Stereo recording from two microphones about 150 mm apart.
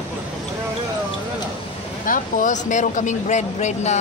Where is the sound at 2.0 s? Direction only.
65° left (ahead or behind).